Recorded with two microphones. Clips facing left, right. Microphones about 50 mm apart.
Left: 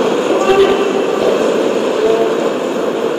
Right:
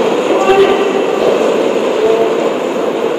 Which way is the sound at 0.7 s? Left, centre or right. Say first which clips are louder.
Right 2 dB; right.